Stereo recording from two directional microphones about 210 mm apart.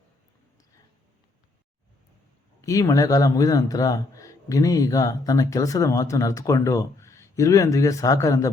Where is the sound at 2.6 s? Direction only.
15° left (ahead or behind).